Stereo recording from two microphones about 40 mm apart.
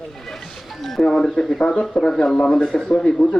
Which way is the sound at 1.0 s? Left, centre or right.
Centre.